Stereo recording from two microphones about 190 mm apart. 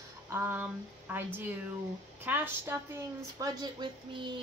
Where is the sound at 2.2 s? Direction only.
10° right (ahead or behind).